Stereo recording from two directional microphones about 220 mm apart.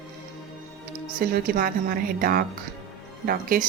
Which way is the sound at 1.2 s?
40° right (ahead or behind).